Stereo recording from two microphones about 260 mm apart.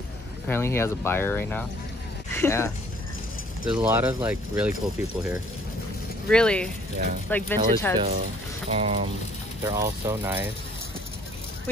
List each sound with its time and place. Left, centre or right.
0.5 s speech: centre
3.6 s speech: centre
8.6 s speech: right
9.7 s speech: centre